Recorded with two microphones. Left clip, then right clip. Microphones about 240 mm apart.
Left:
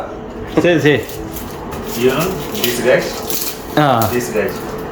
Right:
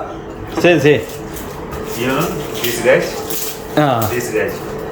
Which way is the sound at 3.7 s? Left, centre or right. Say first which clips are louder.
Left 1 dB; centre.